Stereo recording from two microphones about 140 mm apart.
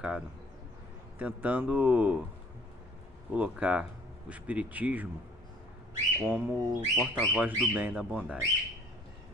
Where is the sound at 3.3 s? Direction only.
10° right (ahead or behind).